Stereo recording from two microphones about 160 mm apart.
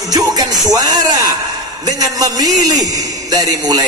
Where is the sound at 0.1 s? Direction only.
25° right (ahead or behind).